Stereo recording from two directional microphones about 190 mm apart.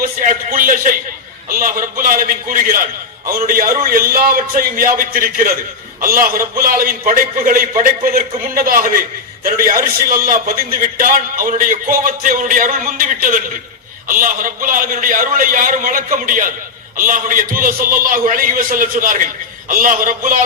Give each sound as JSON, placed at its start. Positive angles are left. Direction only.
{"t": 0.0, "sound": "a man's voice", "side_deg": -45}